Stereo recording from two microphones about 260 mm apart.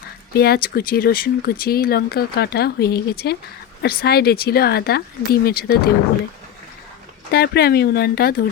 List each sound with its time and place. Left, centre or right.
0.3 s speech: left
7.3 s speech: left